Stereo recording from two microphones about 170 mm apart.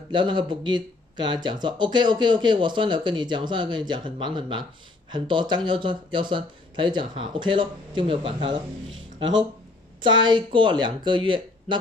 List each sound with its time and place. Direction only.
0.1 s speech: 25° right (ahead or behind)
10.0 s speech: 25° right (ahead or behind)